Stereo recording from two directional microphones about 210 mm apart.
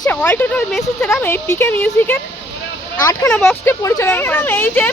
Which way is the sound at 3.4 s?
5° left (ahead or behind).